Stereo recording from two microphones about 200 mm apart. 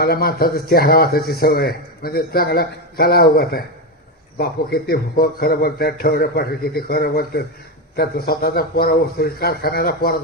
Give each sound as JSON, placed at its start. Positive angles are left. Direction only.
{"t": 0.0, "sound": "speech", "side_deg": 50}